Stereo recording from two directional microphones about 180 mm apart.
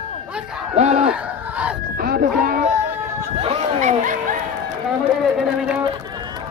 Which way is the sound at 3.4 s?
40° right (ahead or behind).